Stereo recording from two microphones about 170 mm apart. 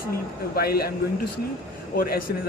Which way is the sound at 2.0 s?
60° left (ahead or behind).